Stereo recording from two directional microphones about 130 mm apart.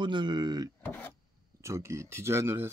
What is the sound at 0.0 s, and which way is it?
Speech, 35° right (ahead or behind).